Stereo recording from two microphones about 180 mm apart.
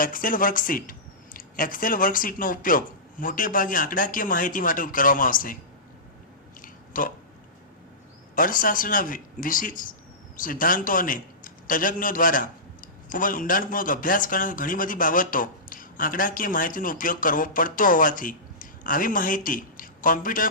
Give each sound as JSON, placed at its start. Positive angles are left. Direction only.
{"t": 0.0, "sound": "speech", "side_deg": 50}
{"t": 6.6, "sound": "a sound", "side_deg": 50}
{"t": 8.4, "sound": "a man's voice", "side_deg": 50}